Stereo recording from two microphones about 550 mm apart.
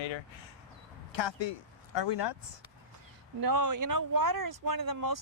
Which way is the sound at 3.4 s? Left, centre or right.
Right.